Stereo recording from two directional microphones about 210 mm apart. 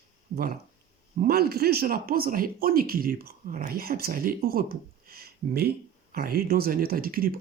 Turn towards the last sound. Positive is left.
turn(degrees=-45)  # may be behind; listen again after turning